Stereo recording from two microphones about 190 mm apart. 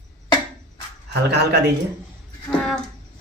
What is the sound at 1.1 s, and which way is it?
Speech, 60° right (ahead or behind).